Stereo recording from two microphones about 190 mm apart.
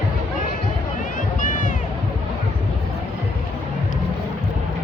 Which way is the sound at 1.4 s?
45° left (ahead or behind).